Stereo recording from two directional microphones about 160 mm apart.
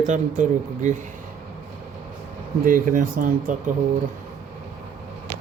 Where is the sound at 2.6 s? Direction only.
60° right (ahead or behind).